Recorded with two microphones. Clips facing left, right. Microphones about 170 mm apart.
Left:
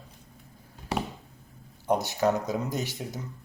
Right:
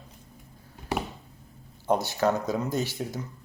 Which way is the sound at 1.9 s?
20° left (ahead or behind).